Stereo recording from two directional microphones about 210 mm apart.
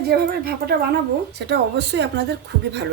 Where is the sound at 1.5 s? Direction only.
55° right (ahead or behind).